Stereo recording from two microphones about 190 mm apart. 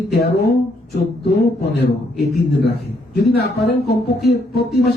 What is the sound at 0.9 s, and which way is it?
Speech, 60° left (ahead or behind).